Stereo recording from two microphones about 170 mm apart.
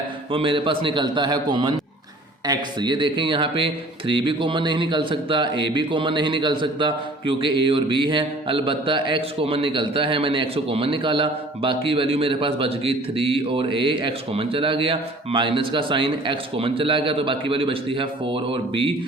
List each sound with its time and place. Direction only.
0.3 s a man's voice: 30° right (ahead or behind)